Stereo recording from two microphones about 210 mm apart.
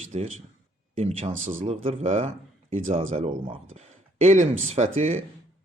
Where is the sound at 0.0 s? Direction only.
35° right (ahead or behind).